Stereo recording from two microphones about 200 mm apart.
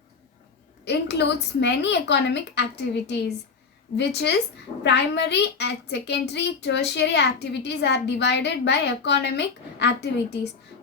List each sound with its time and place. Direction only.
0.9 s a woman's voice: 55° left (ahead or behind)